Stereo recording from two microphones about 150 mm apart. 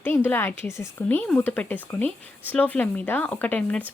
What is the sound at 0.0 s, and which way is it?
A woman's voice, 15° left (ahead or behind).